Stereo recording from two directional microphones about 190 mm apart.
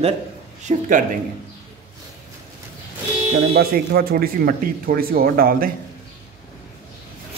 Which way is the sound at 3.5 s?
55° right (ahead or behind).